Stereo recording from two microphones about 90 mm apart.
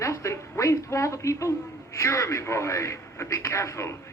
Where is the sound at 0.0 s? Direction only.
35° left (ahead or behind).